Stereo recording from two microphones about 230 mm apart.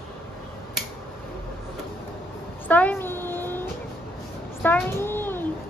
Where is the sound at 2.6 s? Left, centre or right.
Centre.